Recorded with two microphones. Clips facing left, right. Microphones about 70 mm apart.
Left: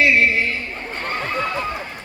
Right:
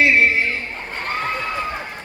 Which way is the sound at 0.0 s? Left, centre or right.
Right.